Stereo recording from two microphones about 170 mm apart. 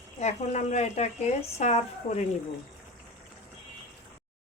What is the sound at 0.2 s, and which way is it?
Speech, 40° left (ahead or behind).